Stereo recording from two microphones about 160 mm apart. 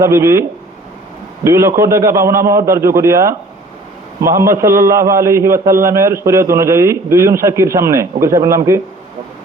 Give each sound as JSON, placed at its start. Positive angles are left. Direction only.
{"t": 0.0, "sound": "a man's voice", "side_deg": -20}
{"t": 1.5, "sound": "a man's voice", "side_deg": -20}